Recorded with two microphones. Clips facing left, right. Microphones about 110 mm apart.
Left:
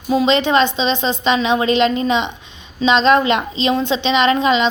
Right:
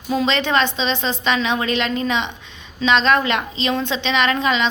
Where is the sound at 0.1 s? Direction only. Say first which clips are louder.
Left 4 dB; 15° left (ahead or behind).